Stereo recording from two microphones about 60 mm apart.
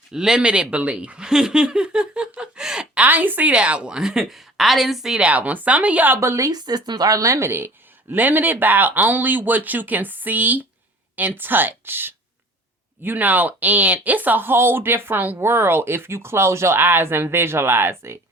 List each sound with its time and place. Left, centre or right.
0.1 s speech: centre
3.0 s speech: right
3.5 s a woman's voice: centre
5.1 s speech: right
6.1 s a woman's voice: right
8.1 s speech: right
15.4 s speech: right
16.8 s speech: right